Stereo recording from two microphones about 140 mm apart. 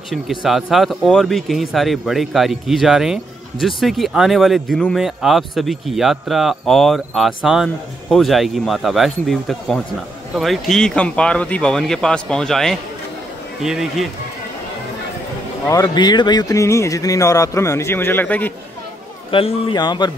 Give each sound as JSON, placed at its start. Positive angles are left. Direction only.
{"t": 0.1, "sound": "speech", "side_deg": 0}
{"t": 15.7, "sound": "speech", "side_deg": 30}
{"t": 19.3, "sound": "speech", "side_deg": 40}